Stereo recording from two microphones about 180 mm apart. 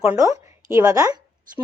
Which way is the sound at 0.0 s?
15° right (ahead or behind).